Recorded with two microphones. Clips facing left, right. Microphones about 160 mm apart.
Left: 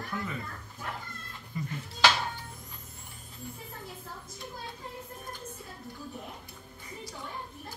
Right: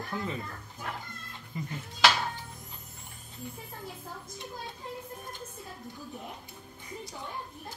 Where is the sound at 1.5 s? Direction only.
20° right (ahead or behind).